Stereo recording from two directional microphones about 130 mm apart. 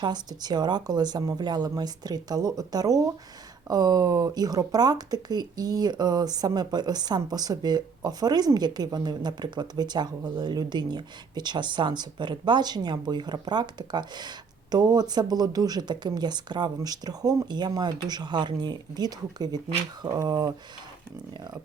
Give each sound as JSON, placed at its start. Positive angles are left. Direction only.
{"t": 0.0, "sound": "speech", "side_deg": -35}